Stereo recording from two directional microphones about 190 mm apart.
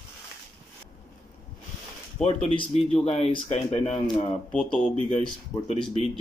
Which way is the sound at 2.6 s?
35° left (ahead or behind).